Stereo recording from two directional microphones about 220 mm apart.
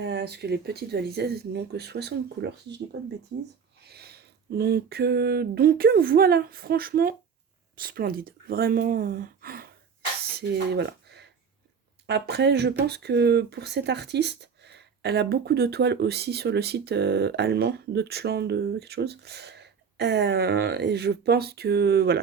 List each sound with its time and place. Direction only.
0.0 s speech: 50° right (ahead or behind)
10.7 s a sound: 50° right (ahead or behind)
12.0 s speech: 50° right (ahead or behind)